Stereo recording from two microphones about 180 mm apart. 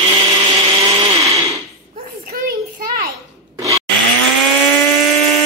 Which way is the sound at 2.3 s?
50° right (ahead or behind).